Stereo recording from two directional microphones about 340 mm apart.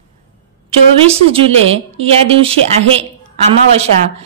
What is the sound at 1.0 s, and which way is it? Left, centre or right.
A woman's voice, centre.